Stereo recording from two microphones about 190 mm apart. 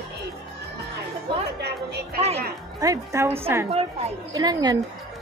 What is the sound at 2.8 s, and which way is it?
A woman's voice, 15° right (ahead or behind).